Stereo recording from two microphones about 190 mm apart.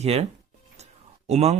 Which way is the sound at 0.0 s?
35° right (ahead or behind).